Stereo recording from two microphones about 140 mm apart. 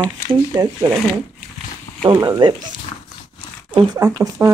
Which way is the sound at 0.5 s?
25° right (ahead or behind).